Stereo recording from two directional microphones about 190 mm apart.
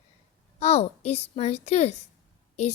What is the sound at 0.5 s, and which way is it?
A woman's voice, 35° left (ahead or behind).